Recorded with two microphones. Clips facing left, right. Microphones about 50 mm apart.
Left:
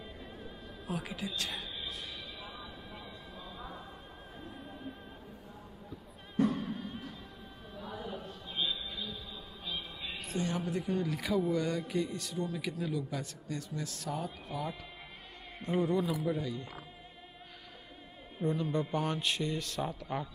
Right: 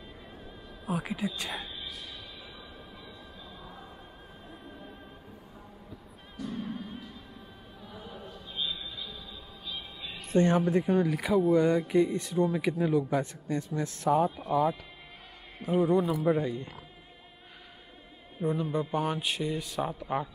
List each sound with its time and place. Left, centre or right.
0.0 s music: centre
0.8 s a man's voice: centre
1.2 s a man's voice: right
3.5 s music: centre
6.6 s music: centre
7.8 s choir: left
8.5 s music: centre
10.3 s speech: right
10.6 s a man's voice: right
14.1 s a man's voice: centre
16.3 s a man's voice: right
18.4 s a man's voice: centre